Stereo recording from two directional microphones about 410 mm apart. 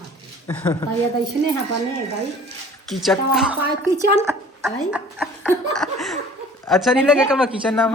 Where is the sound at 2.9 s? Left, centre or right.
Centre.